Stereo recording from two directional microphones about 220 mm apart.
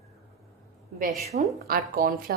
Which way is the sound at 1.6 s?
40° right (ahead or behind).